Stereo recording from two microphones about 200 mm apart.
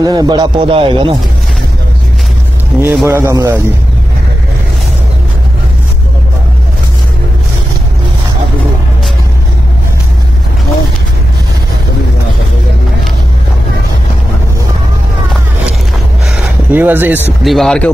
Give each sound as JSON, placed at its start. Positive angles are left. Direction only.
{"t": 0.0, "sound": "speech", "side_deg": -20}
{"t": 2.8, "sound": "a man's voice", "side_deg": -10}
{"t": 16.3, "sound": "a sound", "side_deg": -10}
{"t": 17.4, "sound": "speech", "side_deg": 0}